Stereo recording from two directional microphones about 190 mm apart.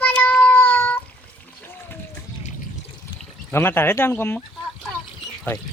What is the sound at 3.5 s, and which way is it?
Speech, 10° left (ahead or behind).